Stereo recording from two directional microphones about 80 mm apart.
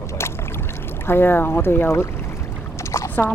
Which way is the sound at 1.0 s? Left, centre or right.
Left.